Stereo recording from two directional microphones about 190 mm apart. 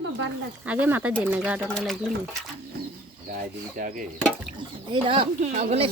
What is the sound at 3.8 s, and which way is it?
Speech, 45° right (ahead or behind).